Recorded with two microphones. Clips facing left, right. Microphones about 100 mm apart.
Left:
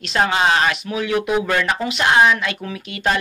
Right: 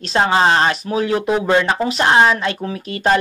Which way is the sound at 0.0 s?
35° right (ahead or behind).